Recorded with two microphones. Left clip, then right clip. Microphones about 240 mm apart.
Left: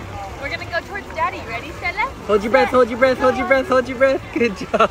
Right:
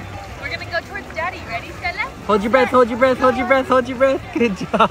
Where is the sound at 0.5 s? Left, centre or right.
Right.